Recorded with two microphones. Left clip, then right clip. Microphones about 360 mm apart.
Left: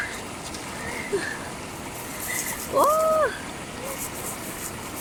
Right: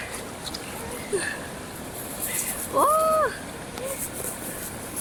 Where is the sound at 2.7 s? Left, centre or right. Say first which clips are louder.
Left 1 dB; centre.